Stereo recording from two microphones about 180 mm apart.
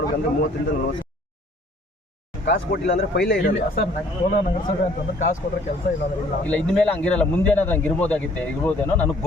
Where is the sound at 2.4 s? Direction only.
75° left (ahead or behind).